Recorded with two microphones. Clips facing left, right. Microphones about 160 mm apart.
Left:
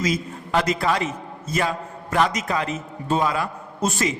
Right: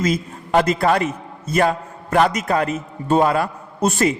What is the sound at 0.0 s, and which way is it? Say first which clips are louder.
A man's voice: right 3 dB; 55° right (ahead or behind).